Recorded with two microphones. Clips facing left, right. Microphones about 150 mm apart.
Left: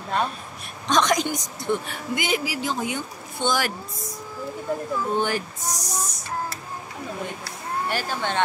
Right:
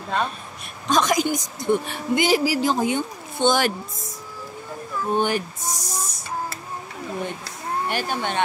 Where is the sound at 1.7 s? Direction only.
25° right (ahead or behind).